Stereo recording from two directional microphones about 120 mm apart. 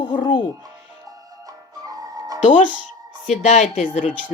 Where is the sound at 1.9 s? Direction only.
30° right (ahead or behind).